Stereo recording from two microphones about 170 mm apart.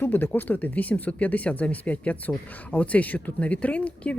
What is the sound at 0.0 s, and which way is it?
Speech, 10° left (ahead or behind).